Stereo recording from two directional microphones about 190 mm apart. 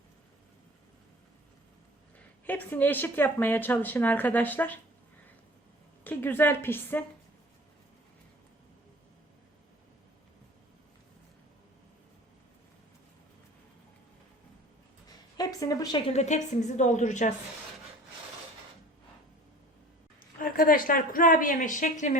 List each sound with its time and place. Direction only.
2.1 s a woman's voice: 10° left (ahead or behind)
6.1 s a woman's voice: 10° left (ahead or behind)
15.4 s a woman's voice: 20° left (ahead or behind)
16.1 s a woman's voice: 40° left (ahead or behind)
20.4 s a woman's voice: 45° left (ahead or behind)